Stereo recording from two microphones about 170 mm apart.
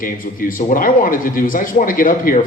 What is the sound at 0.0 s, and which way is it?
A man's voice, 55° left (ahead or behind).